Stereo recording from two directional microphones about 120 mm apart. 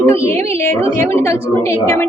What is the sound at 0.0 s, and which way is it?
A woman's voice, 20° left (ahead or behind).